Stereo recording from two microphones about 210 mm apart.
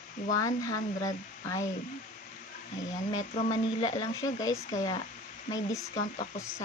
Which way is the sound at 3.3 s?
35° left (ahead or behind).